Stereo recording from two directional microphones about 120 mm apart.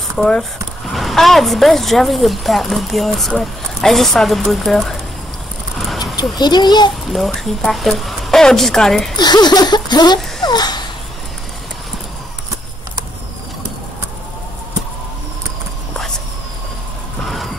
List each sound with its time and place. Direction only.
0.2 s speech: 5° left (ahead or behind)
6.3 s a child's voice: 35° left (ahead or behind)
7.1 s speech: centre (ahead or behind)
9.1 s a sound: 35° left (ahead or behind)